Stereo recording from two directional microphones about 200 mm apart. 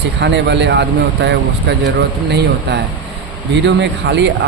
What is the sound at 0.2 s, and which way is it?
Speech, 60° right (ahead or behind).